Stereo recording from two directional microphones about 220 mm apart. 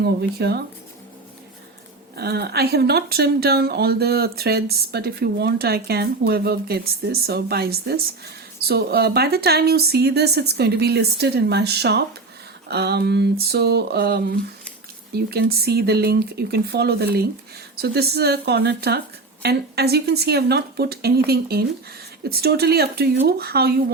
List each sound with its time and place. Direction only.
0.0 s speech: 45° right (ahead or behind)
2.1 s speech: 45° right (ahead or behind)